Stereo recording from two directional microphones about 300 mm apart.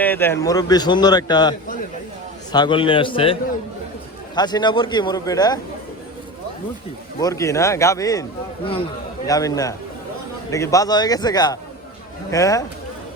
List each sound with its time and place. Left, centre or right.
0.0 s a man's voice: centre
4.4 s a man's voice: centre
7.2 s a man's voice: centre